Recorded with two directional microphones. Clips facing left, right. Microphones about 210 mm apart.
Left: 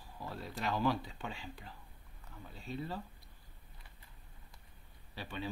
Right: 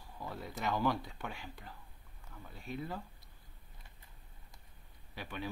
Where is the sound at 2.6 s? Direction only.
15° right (ahead or behind).